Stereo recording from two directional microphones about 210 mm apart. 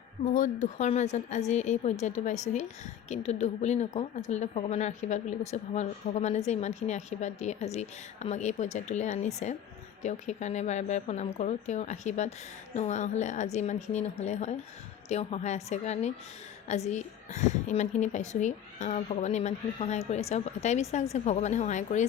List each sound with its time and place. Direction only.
0.3 s a woman's voice: 35° left (ahead or behind)